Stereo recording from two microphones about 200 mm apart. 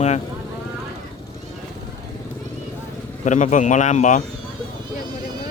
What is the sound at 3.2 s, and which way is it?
Speech, 40° left (ahead or behind).